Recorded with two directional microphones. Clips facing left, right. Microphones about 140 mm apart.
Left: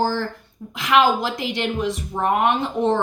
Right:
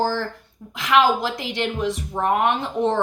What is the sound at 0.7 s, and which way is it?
A woman's voice, 15° left (ahead or behind).